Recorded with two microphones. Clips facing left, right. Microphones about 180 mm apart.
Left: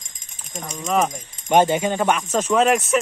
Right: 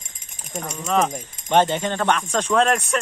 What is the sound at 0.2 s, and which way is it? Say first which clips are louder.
Jingle bell: right 3 dB; 10° right (ahead or behind).